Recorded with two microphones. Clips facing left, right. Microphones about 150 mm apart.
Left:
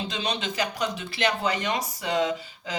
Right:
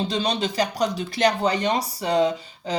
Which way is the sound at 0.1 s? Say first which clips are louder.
Right 6 dB; 35° right (ahead or behind).